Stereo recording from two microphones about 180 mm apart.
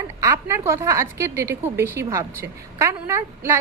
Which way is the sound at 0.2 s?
15° right (ahead or behind).